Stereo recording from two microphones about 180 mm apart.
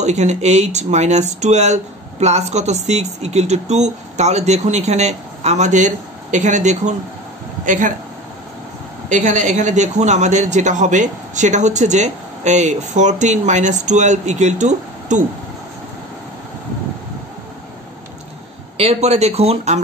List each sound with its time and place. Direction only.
0.0 s speech: 40° right (ahead or behind)
9.1 s speech: 45° right (ahead or behind)
18.8 s speech: 35° right (ahead or behind)